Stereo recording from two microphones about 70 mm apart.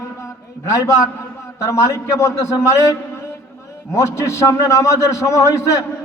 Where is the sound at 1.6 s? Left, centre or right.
Left.